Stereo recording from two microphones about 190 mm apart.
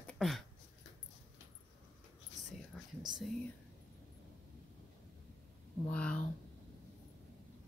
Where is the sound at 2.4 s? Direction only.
40° right (ahead or behind).